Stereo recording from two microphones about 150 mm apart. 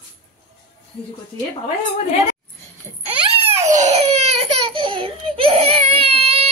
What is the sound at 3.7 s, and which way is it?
Baby cry, 50° right (ahead or behind).